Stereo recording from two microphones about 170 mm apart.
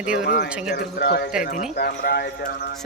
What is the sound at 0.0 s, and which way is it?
Speech, 50° left (ahead or behind).